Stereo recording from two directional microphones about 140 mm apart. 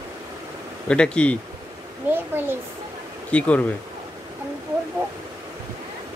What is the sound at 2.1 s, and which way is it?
Speech, 15° right (ahead or behind).